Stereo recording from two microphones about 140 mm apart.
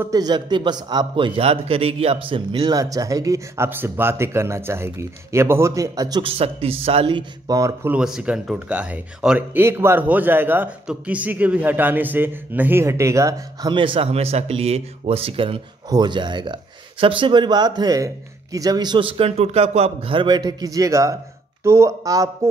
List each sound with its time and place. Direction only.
0.0 s a man's voice: 30° right (ahead or behind)
6.2 s speech: 45° right (ahead or behind)
7.5 s a man's voice: 20° right (ahead or behind)
7.9 s a man's voice: 5° right (ahead or behind); by 13.7 s 20° right (ahead or behind)
13.7 s a man's voice: 35° right (ahead or behind)